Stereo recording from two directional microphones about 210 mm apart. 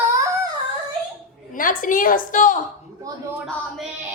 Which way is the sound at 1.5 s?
40° left (ahead or behind).